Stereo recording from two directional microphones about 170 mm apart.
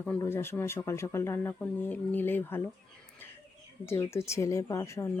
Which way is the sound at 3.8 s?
15° left (ahead or behind).